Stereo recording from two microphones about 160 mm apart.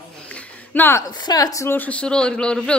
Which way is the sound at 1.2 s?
25° left (ahead or behind).